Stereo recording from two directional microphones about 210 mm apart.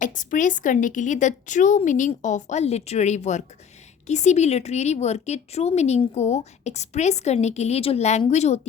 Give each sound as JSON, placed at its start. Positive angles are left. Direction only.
{"t": 0.0, "sound": "a woman's voice", "side_deg": 35}